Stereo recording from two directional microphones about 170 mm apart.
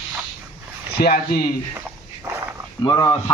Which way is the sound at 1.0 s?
65° left (ahead or behind).